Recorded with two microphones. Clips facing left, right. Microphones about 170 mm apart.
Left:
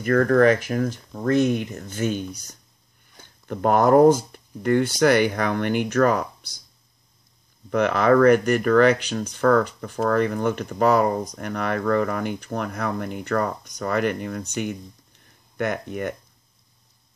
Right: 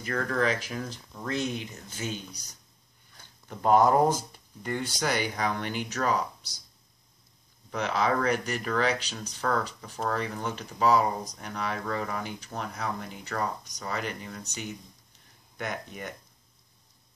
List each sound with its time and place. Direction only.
0.0 s speech: 55° left (ahead or behind)
3.4 s speech: 60° left (ahead or behind)
7.7 s speech: 60° left (ahead or behind)